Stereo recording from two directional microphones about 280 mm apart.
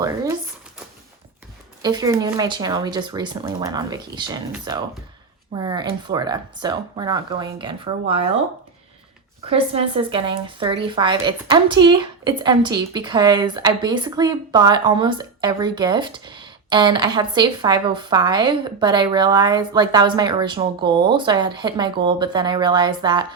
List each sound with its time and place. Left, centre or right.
1.8 s speech: centre
9.5 s speech: right